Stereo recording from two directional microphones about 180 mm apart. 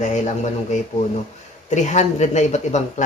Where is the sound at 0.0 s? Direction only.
40° left (ahead or behind).